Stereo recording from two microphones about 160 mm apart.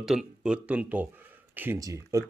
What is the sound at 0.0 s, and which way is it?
Speech, 5° right (ahead or behind).